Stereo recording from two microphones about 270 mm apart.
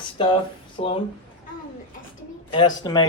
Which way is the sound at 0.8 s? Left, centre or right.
Left.